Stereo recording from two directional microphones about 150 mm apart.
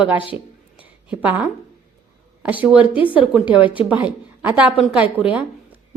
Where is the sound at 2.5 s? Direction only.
10° right (ahead or behind).